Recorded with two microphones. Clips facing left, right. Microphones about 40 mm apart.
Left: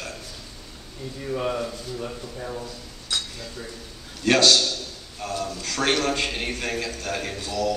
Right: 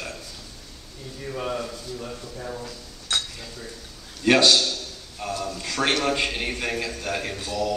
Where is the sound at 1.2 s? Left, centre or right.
Centre.